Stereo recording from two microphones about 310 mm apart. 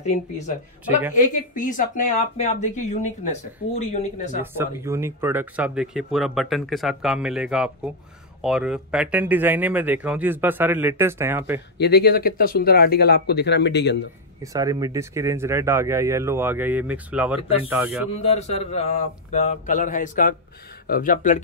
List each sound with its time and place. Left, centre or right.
0.0 s speech: left
4.4 s speech: centre
11.8 s speech: left
14.4 s speech: centre
18.1 s speech: centre